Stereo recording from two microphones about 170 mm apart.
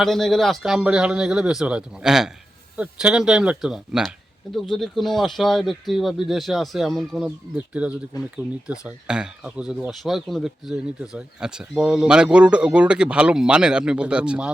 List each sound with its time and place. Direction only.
0.0 s speech: centre (ahead or behind)
8.1 s speech: 20° left (ahead or behind)
8.6 s speech: 5° right (ahead or behind)